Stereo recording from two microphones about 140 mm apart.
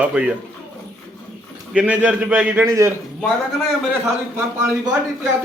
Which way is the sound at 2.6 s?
20° right (ahead or behind).